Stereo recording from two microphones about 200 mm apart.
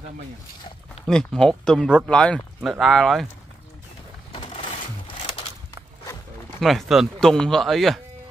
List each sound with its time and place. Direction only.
1.0 s speech: 5° left (ahead or behind)
4.3 s a sound: 25° left (ahead or behind)
5.0 s crushing: 25° left (ahead or behind)
6.6 s speech: centre (ahead or behind)